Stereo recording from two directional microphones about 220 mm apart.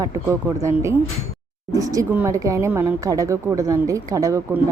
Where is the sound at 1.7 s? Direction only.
15° right (ahead or behind).